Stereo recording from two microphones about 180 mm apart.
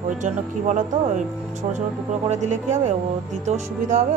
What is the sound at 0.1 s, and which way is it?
Speech, 45° right (ahead or behind).